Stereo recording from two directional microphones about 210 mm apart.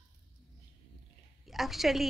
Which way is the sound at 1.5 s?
Centre (ahead or behind).